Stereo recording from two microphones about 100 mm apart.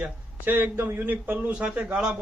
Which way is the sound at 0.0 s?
20° right (ahead or behind).